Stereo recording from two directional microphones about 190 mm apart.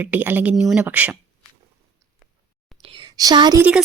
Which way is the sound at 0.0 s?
10° right (ahead or behind).